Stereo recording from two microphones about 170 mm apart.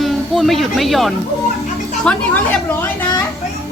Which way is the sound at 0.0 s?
Centre (ahead or behind).